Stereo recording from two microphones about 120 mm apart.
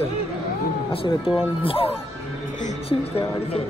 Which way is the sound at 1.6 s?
50° left (ahead or behind).